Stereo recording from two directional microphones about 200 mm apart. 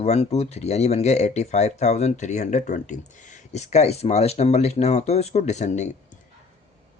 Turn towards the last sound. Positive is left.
turn(degrees=35)  # may be behind; listen again after turning